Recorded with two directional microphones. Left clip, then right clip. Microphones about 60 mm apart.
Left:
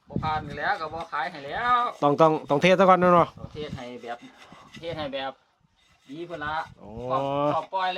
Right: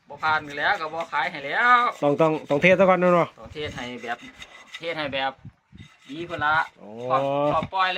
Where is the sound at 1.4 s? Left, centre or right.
Centre.